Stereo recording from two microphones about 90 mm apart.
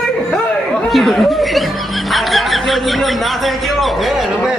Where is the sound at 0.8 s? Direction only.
Centre (ahead or behind).